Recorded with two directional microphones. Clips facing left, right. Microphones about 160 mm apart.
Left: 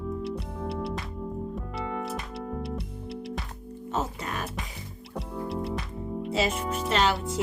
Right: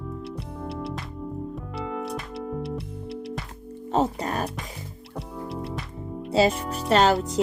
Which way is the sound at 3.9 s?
35° right (ahead or behind).